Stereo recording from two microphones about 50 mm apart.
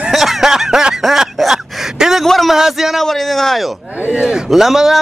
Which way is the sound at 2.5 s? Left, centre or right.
Centre.